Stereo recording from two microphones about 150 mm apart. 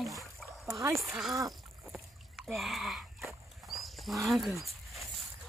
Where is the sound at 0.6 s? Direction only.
20° right (ahead or behind).